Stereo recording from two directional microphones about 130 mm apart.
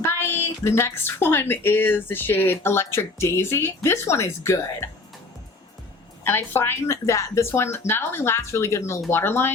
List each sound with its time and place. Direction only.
0.2 s a woman's voice: 20° left (ahead or behind)
6.2 s a woman's voice: 15° left (ahead or behind)